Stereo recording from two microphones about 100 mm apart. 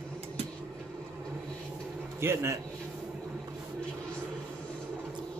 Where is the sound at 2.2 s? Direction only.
25° right (ahead or behind).